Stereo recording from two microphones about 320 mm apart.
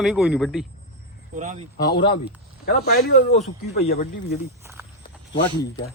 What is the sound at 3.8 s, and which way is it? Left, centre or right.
Speech, left.